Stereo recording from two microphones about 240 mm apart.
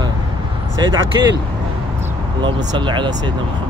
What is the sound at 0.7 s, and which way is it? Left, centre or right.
Speech, centre.